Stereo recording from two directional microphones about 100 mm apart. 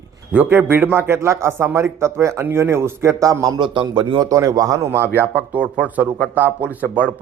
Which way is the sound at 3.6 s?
55° right (ahead or behind).